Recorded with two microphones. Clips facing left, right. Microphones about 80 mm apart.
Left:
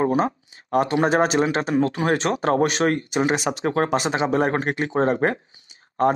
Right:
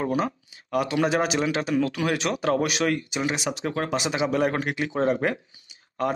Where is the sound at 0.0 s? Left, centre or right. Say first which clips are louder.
Left 5 dB; left.